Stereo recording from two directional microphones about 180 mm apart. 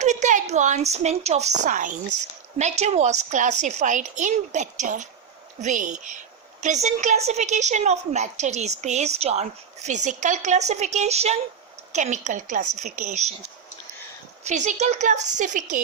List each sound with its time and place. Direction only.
0.0 s a woman's voice: 40° right (ahead or behind)
14.4 s a woman's voice: 40° right (ahead or behind)